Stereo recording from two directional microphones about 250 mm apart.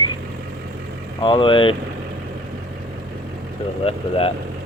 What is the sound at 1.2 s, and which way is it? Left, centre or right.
Speech, centre.